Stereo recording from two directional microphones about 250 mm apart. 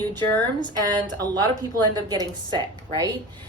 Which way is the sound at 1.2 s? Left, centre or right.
Centre.